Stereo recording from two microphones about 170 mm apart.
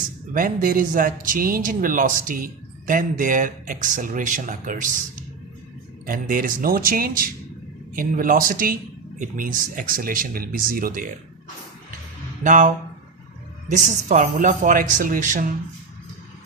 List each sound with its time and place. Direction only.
0.3 s a man's voice: 55° right (ahead or behind)
6.1 s speech: 55° right (ahead or behind)
12.4 s a man's voice: 50° right (ahead or behind)